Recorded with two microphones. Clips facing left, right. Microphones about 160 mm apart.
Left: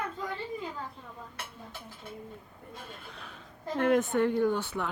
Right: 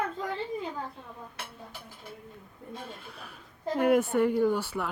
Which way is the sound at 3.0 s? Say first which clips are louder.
Even; 10° right (ahead or behind).